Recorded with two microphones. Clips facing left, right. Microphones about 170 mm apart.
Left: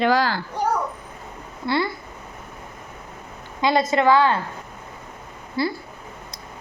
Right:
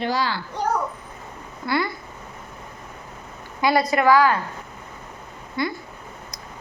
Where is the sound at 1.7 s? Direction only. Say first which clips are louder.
Left 1 dB; 25° left (ahead or behind).